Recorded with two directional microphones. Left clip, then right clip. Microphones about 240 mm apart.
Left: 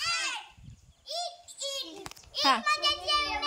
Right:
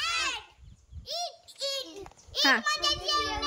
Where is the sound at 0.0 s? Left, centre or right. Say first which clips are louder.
Right 1 dB; right.